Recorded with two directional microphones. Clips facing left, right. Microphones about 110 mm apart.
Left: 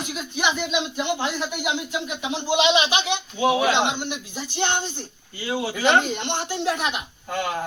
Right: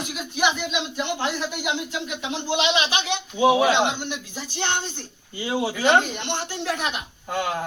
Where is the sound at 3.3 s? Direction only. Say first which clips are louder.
Right 3 dB; 15° right (ahead or behind).